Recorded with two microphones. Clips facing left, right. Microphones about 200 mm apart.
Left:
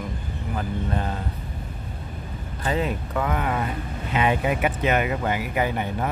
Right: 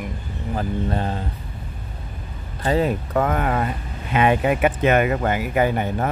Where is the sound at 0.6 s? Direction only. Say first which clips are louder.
Right 4 dB; 30° right (ahead or behind).